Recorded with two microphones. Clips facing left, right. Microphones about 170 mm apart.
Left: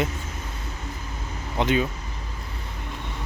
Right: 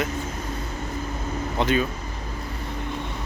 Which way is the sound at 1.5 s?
20° left (ahead or behind).